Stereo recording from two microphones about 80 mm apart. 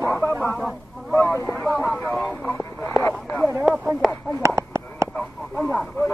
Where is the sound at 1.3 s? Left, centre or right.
Left.